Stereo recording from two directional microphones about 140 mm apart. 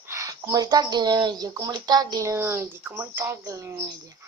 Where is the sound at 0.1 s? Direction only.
20° right (ahead or behind).